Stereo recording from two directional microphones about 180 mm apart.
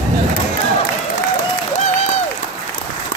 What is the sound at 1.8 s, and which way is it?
Applause, 40° left (ahead or behind).